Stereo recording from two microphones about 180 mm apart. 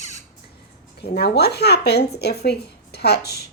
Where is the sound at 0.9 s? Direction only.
60° left (ahead or behind).